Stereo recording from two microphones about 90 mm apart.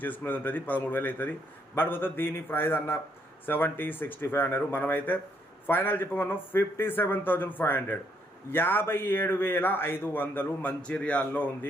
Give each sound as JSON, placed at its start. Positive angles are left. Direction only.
{"t": 0.0, "sound": "speech", "side_deg": 20}